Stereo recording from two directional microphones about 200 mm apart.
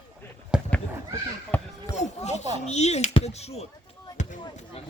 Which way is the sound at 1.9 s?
35° left (ahead or behind).